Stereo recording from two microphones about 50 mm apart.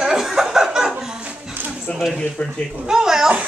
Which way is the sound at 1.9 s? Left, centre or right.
Left.